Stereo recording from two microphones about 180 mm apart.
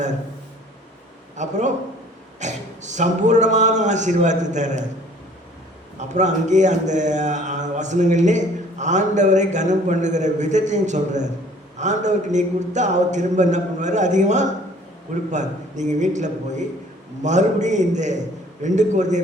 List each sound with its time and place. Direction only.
1.4 s a man's voice: 40° right (ahead or behind)
6.1 s a man's voice: 40° right (ahead or behind)